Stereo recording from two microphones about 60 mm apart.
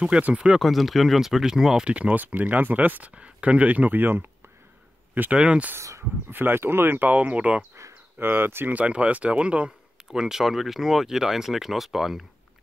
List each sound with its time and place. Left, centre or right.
0.2 s speech: centre
0.6 s speech: centre
2.0 s speech: right
5.3 s speech: centre
5.8 s speech: right
6.3 s speech: right
8.2 s speech: right
8.7 s speech: right
10.1 s speech: centre